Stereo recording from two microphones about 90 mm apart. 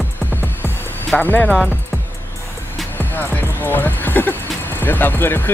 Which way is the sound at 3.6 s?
25° left (ahead or behind).